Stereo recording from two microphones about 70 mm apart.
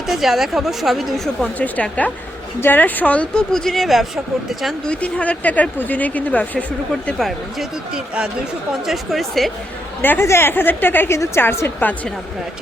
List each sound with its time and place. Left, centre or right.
0.1 s a woman's voice: centre
1.5 s speech: left
3.5 s a woman's voice: centre
4.9 s speech: centre
7.2 s a woman's voice: centre
10.0 s a woman's voice: left